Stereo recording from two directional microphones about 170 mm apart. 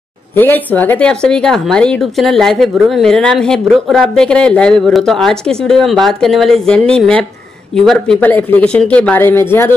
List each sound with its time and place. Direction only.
0.4 s speech: 10° left (ahead or behind)